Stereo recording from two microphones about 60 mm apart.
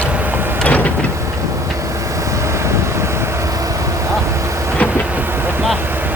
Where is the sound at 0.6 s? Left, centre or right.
Left.